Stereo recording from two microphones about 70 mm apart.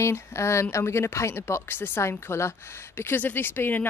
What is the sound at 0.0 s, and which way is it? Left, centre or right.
Speech, left.